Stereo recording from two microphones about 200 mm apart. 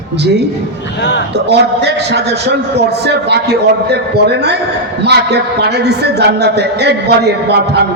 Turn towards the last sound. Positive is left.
turn(degrees=-55)  # may be behind; listen again after turning